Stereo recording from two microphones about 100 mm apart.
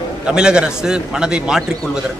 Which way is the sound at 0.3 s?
10° right (ahead or behind).